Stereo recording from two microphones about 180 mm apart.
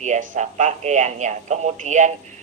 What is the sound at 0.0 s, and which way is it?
A woman's voice, 40° right (ahead or behind).